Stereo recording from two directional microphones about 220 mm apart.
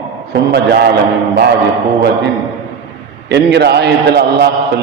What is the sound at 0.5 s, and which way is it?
Speech, 50° right (ahead or behind).